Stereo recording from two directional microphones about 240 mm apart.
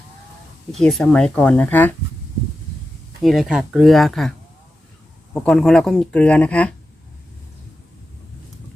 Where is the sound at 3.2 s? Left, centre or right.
Centre.